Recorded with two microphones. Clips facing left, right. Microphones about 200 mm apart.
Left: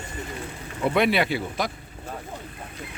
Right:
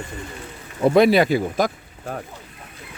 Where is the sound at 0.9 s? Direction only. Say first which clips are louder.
Right 7 dB; 40° right (ahead or behind).